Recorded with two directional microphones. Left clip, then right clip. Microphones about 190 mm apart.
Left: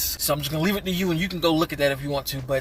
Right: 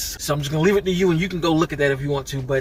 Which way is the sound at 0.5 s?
20° left (ahead or behind).